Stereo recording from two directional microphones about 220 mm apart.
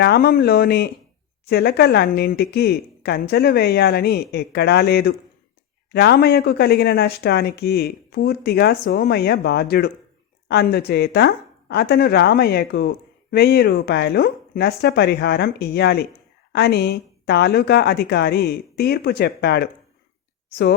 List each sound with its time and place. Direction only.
0.0 s speech: 45° left (ahead or behind)